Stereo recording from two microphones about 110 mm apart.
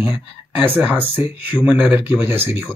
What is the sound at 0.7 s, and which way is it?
Speech, 15° right (ahead or behind).